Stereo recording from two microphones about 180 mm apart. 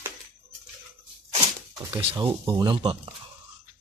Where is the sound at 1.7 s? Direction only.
30° right (ahead or behind).